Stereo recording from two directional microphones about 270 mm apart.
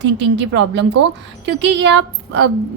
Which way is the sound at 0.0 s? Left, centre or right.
Right.